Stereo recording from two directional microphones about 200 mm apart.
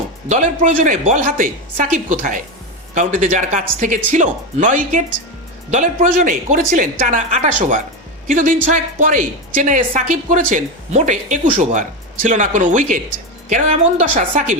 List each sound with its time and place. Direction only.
0.3 s a woman's voice: 40° right (ahead or behind)
14.2 s a woman's voice: 35° right (ahead or behind)